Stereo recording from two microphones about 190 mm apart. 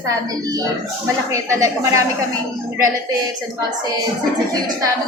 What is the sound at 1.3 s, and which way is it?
Music, 15° right (ahead or behind).